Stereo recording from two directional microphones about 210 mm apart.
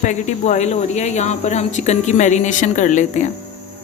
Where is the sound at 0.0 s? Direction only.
35° left (ahead or behind).